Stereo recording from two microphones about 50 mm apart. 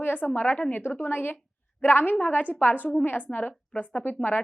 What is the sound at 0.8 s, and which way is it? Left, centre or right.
A woman's voice, left.